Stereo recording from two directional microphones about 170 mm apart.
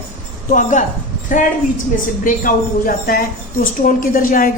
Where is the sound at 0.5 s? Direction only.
45° left (ahead or behind).